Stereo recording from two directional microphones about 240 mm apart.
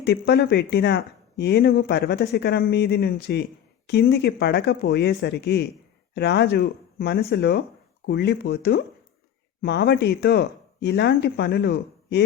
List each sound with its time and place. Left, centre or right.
0.0 s speech: left